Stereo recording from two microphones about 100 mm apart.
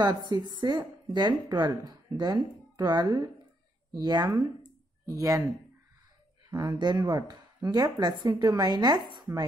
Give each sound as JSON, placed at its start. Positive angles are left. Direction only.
{"t": 0.1, "sound": "a woman's voice", "side_deg": -40}
{"t": 6.5, "sound": "speech", "side_deg": -45}